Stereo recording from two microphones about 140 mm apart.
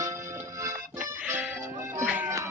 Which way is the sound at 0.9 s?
10° right (ahead or behind).